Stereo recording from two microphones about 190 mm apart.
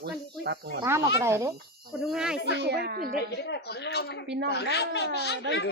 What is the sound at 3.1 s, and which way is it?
Speech, 60° left (ahead or behind).